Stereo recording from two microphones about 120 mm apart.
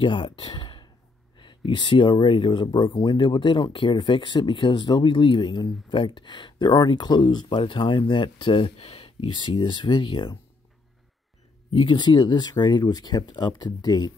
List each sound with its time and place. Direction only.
0.0 s speech: 40° left (ahead or behind)
9.3 s speech: 40° left (ahead or behind)
11.7 s speech: 40° left (ahead or behind)